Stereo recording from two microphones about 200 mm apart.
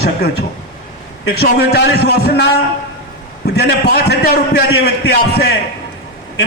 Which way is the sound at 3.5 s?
55° left (ahead or behind).